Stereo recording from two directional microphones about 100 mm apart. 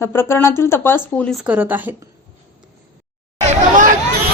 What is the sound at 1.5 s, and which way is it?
Speech, 20° right (ahead or behind).